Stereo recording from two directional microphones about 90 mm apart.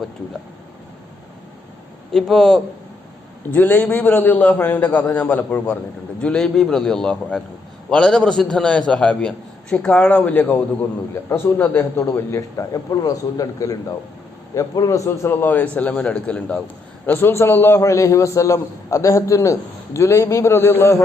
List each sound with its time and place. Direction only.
2.1 s a man's voice: 5° left (ahead or behind)
3.5 s a man's voice: 20° left (ahead or behind)
17.2 s a man's voice: 25° left (ahead or behind)